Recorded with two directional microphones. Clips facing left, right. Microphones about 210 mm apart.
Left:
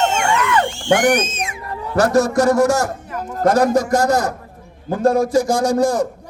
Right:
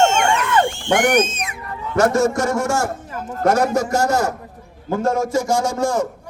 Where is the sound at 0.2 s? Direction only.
30° right (ahead or behind).